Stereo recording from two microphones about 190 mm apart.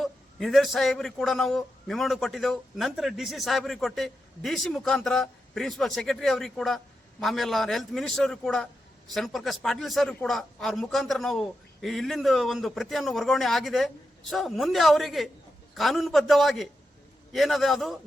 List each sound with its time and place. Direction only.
0.0 s a man's voice: centre (ahead or behind)